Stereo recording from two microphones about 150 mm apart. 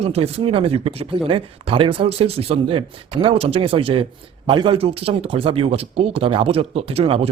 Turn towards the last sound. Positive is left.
turn(degrees=-40)  # may be behind; listen again after turning